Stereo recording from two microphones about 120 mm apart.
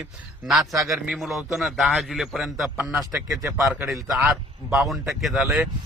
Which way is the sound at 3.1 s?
25° right (ahead or behind).